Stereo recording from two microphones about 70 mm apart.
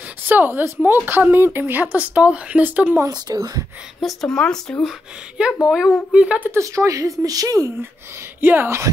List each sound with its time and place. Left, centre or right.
0.3 s a woman's voice: right
3.1 s speech: right
4.0 s speech: centre
5.7 s speech: centre
6.6 s a woman's voice: right
8.4 s a woman's voice: right